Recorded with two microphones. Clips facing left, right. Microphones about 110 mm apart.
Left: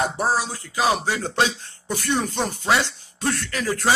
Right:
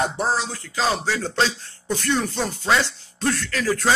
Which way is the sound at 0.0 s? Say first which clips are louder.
Even; 10° left (ahead or behind).